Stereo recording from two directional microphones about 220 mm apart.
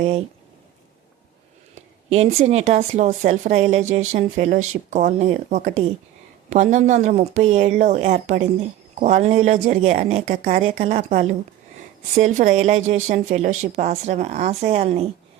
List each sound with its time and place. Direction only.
0.0 s speech: 30° right (ahead or behind)
2.0 s a woman's voice: 30° right (ahead or behind)